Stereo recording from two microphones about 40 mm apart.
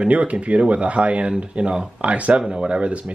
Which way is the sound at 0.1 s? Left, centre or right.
Right.